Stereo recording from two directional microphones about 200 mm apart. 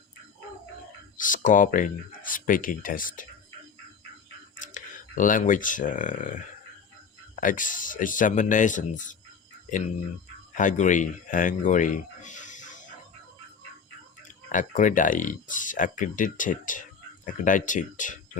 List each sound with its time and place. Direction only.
1.1 s speech: 40° left (ahead or behind)
4.6 s speech: 40° left (ahead or behind)
7.4 s speech: 40° left (ahead or behind)
10.5 s speech: 40° left (ahead or behind)
14.2 s speech: 40° left (ahead or behind)